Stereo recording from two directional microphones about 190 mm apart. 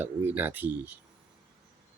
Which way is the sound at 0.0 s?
10° right (ahead or behind).